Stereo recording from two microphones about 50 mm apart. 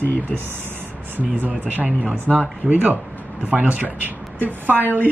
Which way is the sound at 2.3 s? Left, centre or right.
Centre.